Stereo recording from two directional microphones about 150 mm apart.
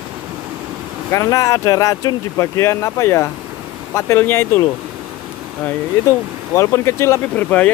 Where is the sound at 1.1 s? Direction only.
20° left (ahead or behind).